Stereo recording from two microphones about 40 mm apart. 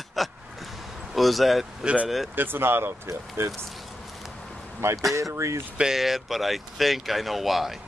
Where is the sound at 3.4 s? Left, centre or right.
Right.